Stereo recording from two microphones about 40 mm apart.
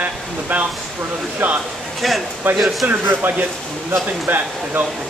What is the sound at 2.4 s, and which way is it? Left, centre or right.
Speech, right.